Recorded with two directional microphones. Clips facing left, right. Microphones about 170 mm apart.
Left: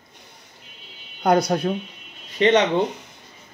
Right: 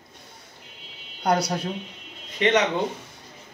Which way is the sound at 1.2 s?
55° left (ahead or behind).